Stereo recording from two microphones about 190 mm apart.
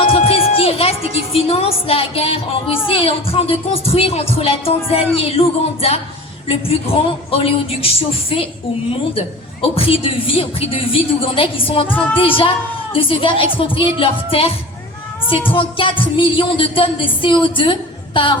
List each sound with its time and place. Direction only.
0.0 s music: 30° left (ahead or behind)
2.8 s speech: 30° left (ahead or behind)
8.9 s a woman's voice: 30° left (ahead or behind)
15.5 s a woman's voice: 25° left (ahead or behind)